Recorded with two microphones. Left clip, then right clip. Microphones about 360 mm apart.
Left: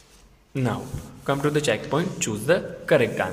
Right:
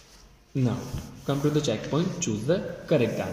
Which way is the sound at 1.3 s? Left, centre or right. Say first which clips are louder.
Left 4 dB; left.